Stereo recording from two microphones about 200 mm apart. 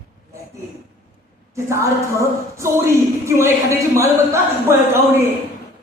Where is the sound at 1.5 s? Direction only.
15° right (ahead or behind).